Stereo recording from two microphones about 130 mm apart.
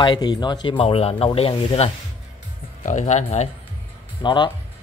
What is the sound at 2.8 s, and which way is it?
Speech, 75° left (ahead or behind).